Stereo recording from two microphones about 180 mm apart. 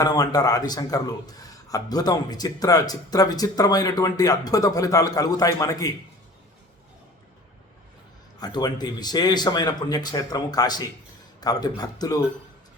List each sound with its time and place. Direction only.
0.0 s a man's voice: 20° left (ahead or behind)
8.4 s a man's voice: 25° left (ahead or behind)